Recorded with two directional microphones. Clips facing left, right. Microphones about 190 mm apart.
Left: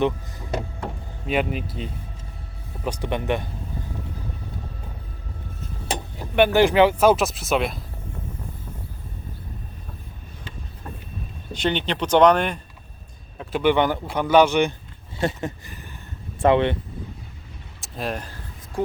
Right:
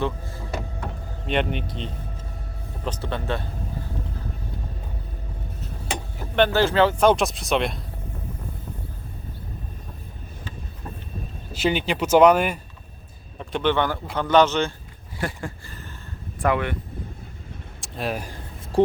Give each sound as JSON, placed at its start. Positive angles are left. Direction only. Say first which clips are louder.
{"t": 1.3, "sound": "speech", "louder": "left 1 dB", "side_deg": 5}
{"t": 6.3, "sound": "speech", "louder": "left 3 dB", "side_deg": 15}
{"t": 11.5, "sound": "speech", "louder": "right 1 dB", "side_deg": -5}
{"t": 13.4, "sound": "speech", "louder": "left 3 dB", "side_deg": 5}
{"t": 15.2, "sound": "a sound", "louder": "left 5 dB", "side_deg": 25}
{"t": 17.7, "sound": "speech", "louder": "right 1 dB", "side_deg": 0}